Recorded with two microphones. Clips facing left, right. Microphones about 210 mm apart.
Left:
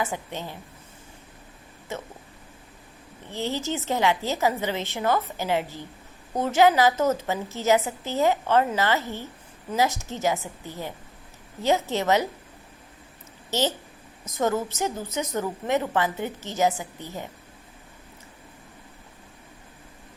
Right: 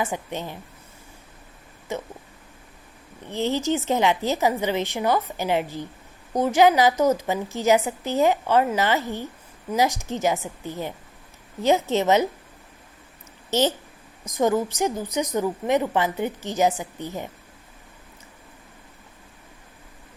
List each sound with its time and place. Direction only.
0.0 s a woman's voice: 15° right (ahead or behind)
3.3 s a woman's voice: 20° right (ahead or behind)
13.5 s a woman's voice: 20° right (ahead or behind)